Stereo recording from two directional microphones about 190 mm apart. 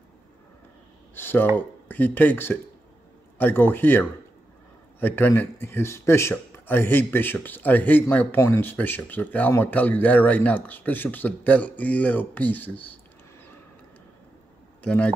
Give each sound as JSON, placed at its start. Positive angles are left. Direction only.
{"t": 1.1, "sound": "speech", "side_deg": 10}
{"t": 14.8, "sound": "a man's voice", "side_deg": 5}